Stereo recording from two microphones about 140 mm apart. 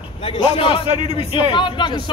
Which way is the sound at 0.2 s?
40° left (ahead or behind).